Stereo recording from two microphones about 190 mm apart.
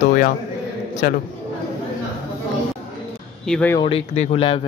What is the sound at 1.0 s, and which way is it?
Speech, 45° left (ahead or behind).